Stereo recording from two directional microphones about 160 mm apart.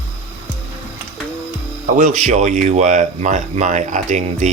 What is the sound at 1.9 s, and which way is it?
Speech, 50° right (ahead or behind).